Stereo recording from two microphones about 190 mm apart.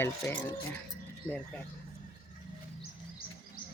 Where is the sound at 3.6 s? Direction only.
45° left (ahead or behind).